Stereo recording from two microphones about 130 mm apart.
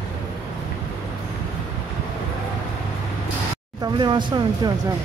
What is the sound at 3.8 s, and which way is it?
Speech, 35° right (ahead or behind).